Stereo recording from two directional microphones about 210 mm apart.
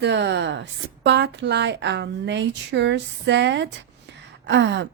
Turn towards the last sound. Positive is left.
turn(degrees=-55)  # may be behind; listen again after turning